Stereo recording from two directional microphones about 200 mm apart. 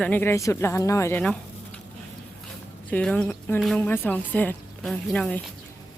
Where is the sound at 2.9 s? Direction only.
5° left (ahead or behind).